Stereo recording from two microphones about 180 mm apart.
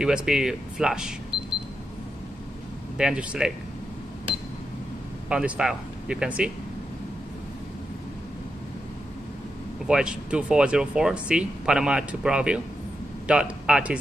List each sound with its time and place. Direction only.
0.0 s speech: 5° right (ahead or behind)
1.3 s camera: 30° right (ahead or behind)
3.0 s speech: 5° right (ahead or behind)
5.3 s speech: 5° right (ahead or behind)
9.8 s speech: 5° right (ahead or behind)